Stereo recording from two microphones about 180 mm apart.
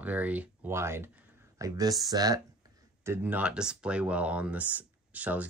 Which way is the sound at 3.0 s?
10° right (ahead or behind).